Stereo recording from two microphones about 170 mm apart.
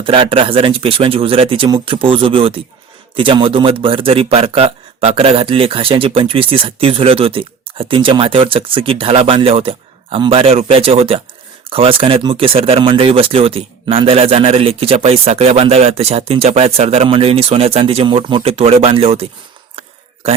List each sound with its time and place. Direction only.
0.0 s a man's voice: 30° right (ahead or behind)